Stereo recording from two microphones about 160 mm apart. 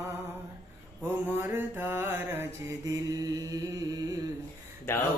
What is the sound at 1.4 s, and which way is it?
Mantra, 15° right (ahead or behind).